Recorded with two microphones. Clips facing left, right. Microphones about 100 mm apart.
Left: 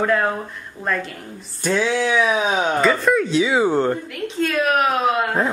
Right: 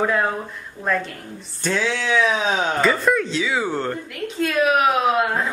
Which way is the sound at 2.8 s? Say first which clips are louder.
Left 1 dB; centre (ahead or behind).